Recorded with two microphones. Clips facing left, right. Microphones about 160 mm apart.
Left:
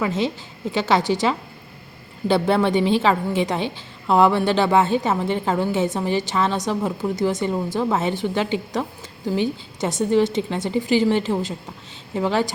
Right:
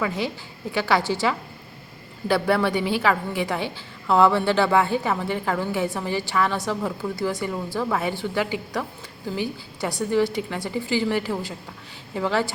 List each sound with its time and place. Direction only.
0.0 s a woman's voice: 20° left (ahead or behind)